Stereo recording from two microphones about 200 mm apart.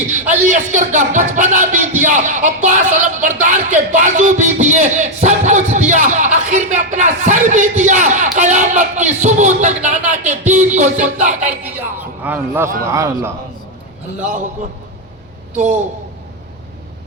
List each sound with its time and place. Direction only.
0.4 s speech: 40° right (ahead or behind)
11.2 s music: 35° right (ahead or behind)
11.6 s a sound: 10° right (ahead or behind)
12.9 s a man's voice: 15° right (ahead or behind)